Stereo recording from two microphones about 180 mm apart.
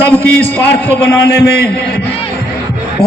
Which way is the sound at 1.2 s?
65° left (ahead or behind).